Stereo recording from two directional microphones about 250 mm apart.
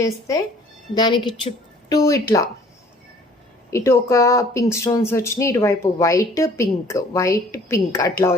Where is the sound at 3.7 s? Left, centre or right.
Centre.